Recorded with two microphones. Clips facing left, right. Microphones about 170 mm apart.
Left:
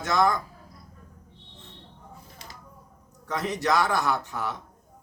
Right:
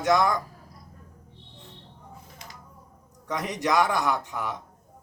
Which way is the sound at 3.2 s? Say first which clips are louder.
Left 1 dB; 15° right (ahead or behind).